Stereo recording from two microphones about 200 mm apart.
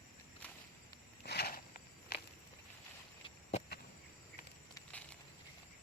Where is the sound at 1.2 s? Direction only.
50° left (ahead or behind).